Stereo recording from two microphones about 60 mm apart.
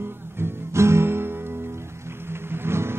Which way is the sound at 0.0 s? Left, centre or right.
Right.